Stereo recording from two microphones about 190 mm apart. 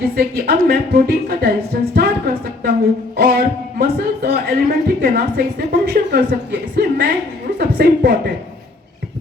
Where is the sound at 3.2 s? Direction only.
50° right (ahead or behind).